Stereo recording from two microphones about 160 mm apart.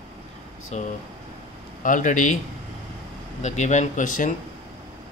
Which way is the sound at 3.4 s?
45° left (ahead or behind).